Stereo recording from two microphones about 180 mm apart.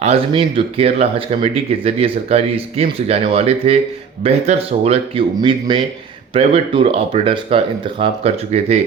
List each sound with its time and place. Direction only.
0.0 s speech: 30° right (ahead or behind)